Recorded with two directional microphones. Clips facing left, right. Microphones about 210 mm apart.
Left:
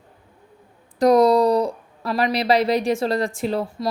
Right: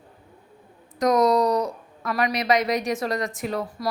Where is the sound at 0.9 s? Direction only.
30° left (ahead or behind).